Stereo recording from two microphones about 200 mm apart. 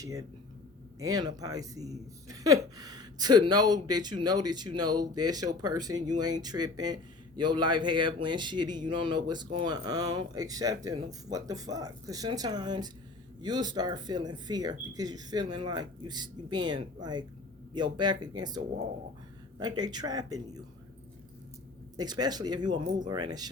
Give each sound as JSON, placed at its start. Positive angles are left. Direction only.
{"t": 0.0, "sound": "speech", "side_deg": -15}
{"t": 21.9, "sound": "speech", "side_deg": -20}